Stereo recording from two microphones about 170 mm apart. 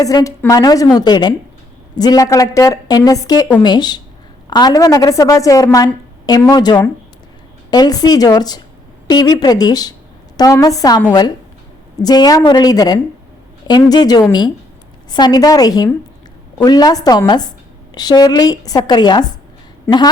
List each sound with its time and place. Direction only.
0.0 s a woman's voice: 20° left (ahead or behind)